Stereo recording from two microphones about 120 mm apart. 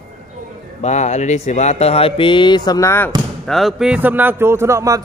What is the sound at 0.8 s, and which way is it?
Speech, 70° left (ahead or behind).